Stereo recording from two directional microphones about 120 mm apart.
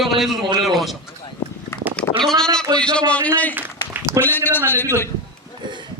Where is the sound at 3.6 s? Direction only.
15° right (ahead or behind).